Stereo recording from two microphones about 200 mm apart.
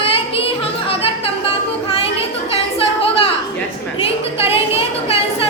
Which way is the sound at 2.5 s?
30° left (ahead or behind).